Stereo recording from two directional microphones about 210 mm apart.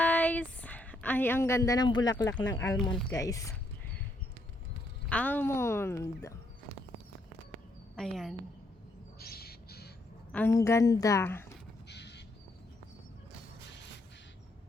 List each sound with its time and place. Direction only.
0.0 s a sound: 5° left (ahead or behind)
2.8 s speech: 20° left (ahead or behind)
5.0 s speech: 5° left (ahead or behind)
7.9 s a woman's voice: centre (ahead or behind)
9.1 s crow: 45° left (ahead or behind)
10.3 s speech: 10° left (ahead or behind)
11.9 s crow: 55° left (ahead or behind)